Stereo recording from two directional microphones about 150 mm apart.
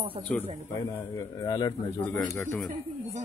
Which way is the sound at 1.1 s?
25° left (ahead or behind).